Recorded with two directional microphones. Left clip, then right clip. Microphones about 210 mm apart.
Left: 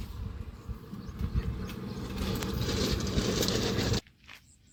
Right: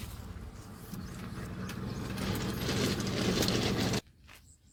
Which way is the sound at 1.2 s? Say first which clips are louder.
Left 3 dB; 40° right (ahead or behind).